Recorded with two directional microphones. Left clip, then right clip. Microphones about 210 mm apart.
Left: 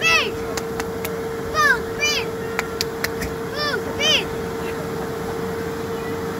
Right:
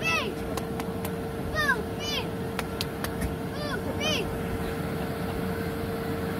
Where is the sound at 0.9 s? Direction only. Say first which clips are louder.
Left 8 dB; 40° right (ahead or behind).